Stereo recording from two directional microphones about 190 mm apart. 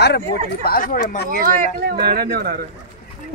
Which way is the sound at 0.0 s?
60° left (ahead or behind).